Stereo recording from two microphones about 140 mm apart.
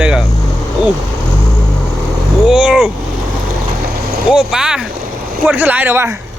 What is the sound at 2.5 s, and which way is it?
Speech, 5° right (ahead or behind).